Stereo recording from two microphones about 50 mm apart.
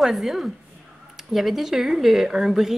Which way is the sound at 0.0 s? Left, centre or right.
Centre.